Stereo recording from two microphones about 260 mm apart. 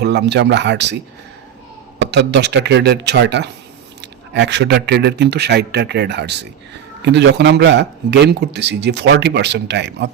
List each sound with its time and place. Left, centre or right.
0.0 s speech: right
2.0 s speech: right